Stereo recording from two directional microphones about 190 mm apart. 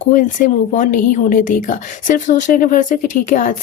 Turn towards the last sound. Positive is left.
turn(degrees=40)  # may be behind; listen again after turning